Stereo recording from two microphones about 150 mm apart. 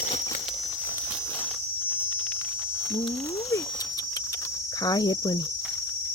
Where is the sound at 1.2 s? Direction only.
10° left (ahead or behind).